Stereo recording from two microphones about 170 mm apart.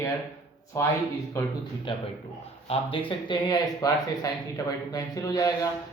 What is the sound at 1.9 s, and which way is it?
Speech, 30° left (ahead or behind).